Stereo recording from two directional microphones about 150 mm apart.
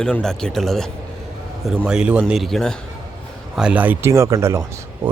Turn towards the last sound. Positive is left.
turn(degrees=-20)  # may be behind; listen again after turning